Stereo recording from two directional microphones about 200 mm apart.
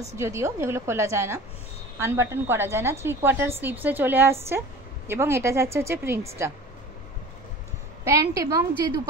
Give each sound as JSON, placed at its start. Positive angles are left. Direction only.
{"t": 0.1, "sound": "a woman's voice", "side_deg": -15}
{"t": 8.0, "sound": "a woman's voice", "side_deg": -15}